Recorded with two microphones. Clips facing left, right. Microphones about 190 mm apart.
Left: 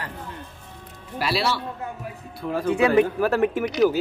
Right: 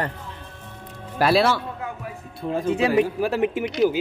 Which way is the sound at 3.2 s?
10° right (ahead or behind).